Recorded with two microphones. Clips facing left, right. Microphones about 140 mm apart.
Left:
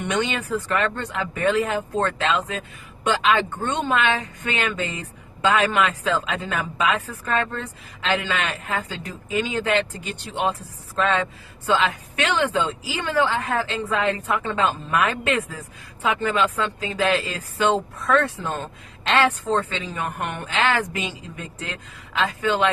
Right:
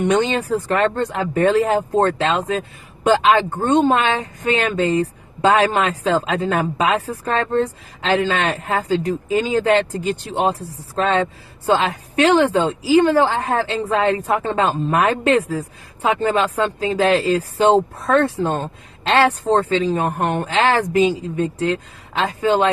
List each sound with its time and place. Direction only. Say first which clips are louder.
0.0 s speech: right 7 dB; 35° right (ahead or behind)